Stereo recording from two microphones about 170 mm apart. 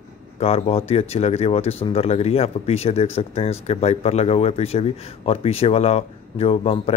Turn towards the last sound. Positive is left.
turn(degrees=35)  # may be behind; listen again after turning